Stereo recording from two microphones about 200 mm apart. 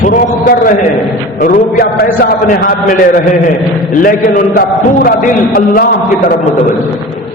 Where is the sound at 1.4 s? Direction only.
40° left (ahead or behind).